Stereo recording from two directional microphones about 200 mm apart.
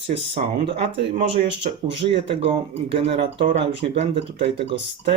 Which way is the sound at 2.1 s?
30° right (ahead or behind).